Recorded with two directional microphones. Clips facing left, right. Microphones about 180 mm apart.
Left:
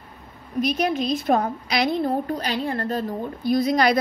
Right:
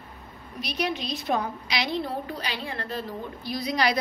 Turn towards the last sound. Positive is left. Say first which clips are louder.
# left 7 dB
turn(degrees=50)  # may be behind; listen again after turning